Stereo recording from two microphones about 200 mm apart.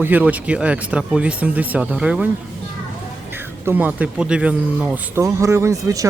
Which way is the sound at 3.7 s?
10° right (ahead or behind).